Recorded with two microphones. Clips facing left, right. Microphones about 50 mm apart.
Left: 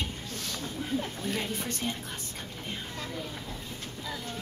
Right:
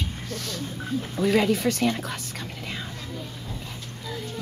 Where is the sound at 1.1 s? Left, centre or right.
Right.